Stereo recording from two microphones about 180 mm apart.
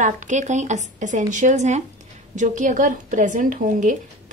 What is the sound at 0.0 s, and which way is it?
Speech, 45° right (ahead or behind).